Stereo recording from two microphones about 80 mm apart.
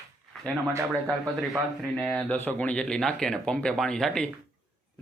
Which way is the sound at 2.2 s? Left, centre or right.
Left.